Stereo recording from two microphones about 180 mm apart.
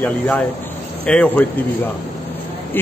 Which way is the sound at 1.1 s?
5° left (ahead or behind).